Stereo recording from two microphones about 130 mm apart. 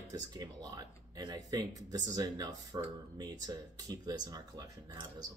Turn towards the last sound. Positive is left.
turn(degrees=-30)  # may be behind; listen again after turning